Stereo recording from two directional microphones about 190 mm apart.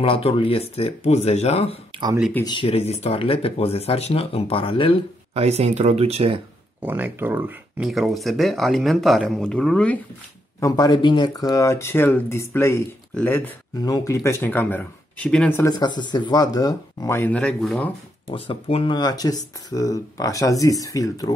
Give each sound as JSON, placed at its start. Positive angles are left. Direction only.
{"t": 0.0, "sound": "speech", "side_deg": 30}
{"t": 5.3, "sound": "speech", "side_deg": -35}
{"t": 6.8, "sound": "speech", "side_deg": -10}
{"t": 10.6, "sound": "speech", "side_deg": 20}
{"t": 15.6, "sound": "speech", "side_deg": 20}
{"t": 18.3, "sound": "speech", "side_deg": 30}